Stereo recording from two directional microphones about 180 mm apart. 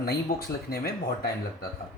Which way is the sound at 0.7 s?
55° left (ahead or behind).